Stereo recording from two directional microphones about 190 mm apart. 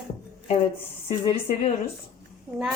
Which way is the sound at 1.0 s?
30° left (ahead or behind).